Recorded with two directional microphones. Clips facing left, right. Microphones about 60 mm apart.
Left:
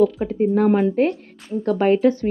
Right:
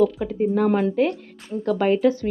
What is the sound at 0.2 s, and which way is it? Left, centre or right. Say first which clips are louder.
Speech: left 2 dB; left.